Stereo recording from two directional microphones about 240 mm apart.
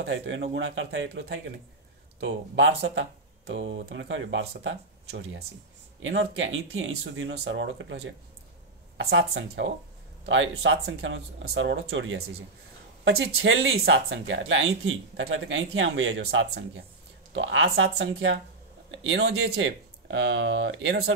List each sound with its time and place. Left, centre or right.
0.0 s speech: right